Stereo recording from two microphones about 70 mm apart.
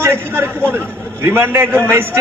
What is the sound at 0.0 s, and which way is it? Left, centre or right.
A man's voice, right.